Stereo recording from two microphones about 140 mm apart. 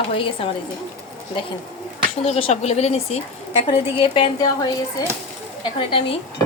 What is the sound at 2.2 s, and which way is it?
A woman's voice, 50° left (ahead or behind).